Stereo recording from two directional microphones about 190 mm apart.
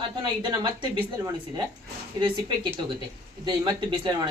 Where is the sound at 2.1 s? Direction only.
25° right (ahead or behind).